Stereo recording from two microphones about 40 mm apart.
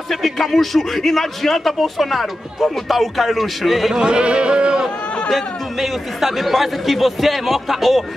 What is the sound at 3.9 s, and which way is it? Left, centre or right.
Speech, right.